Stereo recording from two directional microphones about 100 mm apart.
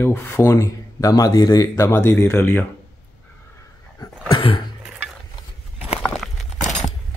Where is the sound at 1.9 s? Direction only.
20° left (ahead or behind).